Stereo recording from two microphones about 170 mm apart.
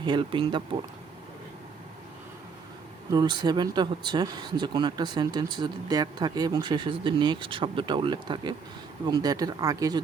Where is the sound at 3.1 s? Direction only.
25° right (ahead or behind).